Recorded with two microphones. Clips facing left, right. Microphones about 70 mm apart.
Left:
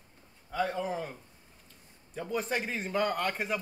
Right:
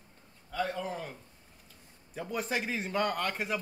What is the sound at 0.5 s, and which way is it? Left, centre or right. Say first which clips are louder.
Speech: left 2 dB; centre.